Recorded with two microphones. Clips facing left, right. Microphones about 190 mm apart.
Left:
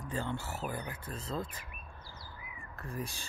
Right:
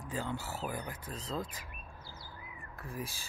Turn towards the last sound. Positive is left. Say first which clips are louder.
# left 1 dB
turn(degrees=-90)